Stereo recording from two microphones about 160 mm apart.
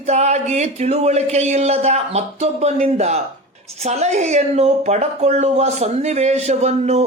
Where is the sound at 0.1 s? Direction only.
45° right (ahead or behind).